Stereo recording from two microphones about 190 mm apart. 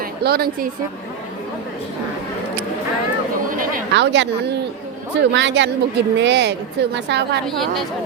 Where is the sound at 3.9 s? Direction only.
70° right (ahead or behind).